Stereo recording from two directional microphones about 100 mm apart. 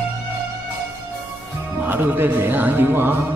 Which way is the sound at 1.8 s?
20° right (ahead or behind).